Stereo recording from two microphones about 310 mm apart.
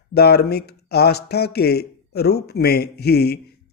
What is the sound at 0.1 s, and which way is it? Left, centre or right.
Speech, left.